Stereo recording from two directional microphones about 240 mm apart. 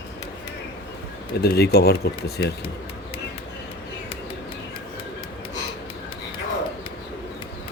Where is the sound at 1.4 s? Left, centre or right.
Left.